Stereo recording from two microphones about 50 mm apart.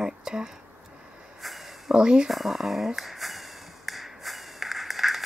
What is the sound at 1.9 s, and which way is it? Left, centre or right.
Speech, centre.